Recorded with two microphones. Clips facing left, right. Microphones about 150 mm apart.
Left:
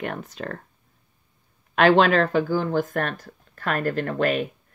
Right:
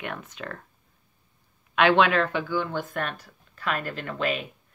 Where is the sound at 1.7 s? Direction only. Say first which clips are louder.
Left 3 dB; 35° left (ahead or behind).